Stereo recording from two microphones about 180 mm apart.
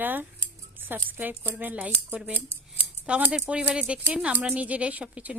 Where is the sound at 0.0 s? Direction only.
10° right (ahead or behind).